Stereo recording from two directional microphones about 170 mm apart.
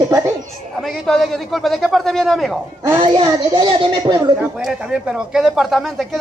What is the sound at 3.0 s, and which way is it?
Speech, 30° right (ahead or behind).